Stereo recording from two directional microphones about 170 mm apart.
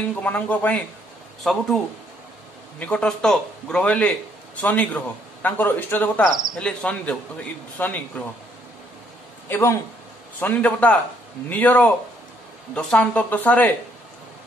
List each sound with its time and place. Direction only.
0.1 s a man's voice: 10° left (ahead or behind)
2.8 s a man's voice: 5° left (ahead or behind)
9.5 s a man's voice: 15° left (ahead or behind)